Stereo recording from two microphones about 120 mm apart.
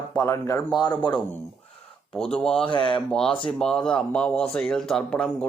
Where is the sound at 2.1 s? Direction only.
5° left (ahead or behind).